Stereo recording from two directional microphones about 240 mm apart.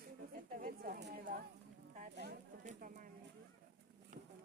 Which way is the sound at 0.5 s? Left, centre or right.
Right.